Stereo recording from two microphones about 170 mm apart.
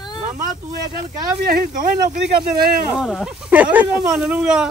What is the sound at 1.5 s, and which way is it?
Speech, 55° right (ahead or behind).